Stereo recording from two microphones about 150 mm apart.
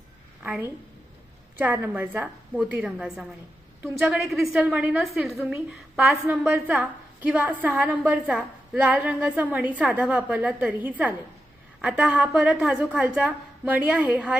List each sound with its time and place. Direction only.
0.4 s a woman's voice: 10° right (ahead or behind)